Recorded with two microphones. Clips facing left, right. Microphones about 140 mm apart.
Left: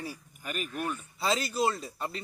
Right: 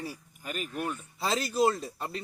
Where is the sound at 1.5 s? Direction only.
50° right (ahead or behind).